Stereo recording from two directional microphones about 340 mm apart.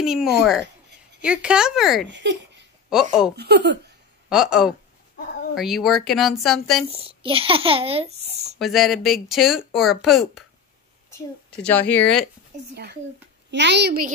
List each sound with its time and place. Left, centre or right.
0.0 s speech: centre
2.0 s speech: right
2.9 s speech: centre
3.3 s a child's voice: right
4.3 s speech: centre
6.9 s a child's voice: centre
8.5 s a woman's voice: centre
13.5 s a child's voice: right